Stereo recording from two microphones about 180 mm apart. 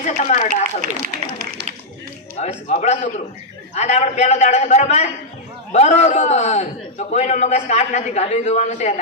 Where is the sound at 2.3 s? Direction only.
35° left (ahead or behind).